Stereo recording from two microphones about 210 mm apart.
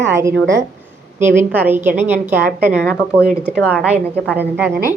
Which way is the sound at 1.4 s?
10° right (ahead or behind).